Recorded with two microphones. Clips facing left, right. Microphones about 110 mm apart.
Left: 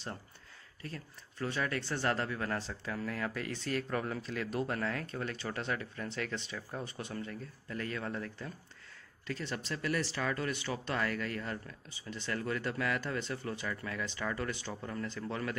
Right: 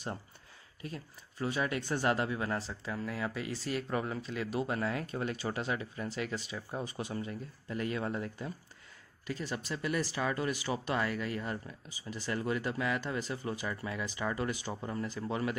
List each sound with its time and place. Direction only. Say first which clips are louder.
0.8 s speech: right 2 dB; 15° right (ahead or behind)